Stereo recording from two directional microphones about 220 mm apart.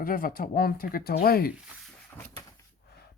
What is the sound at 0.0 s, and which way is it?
Speech, 40° left (ahead or behind).